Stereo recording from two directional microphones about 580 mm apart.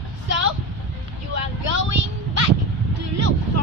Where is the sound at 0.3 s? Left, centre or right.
Right.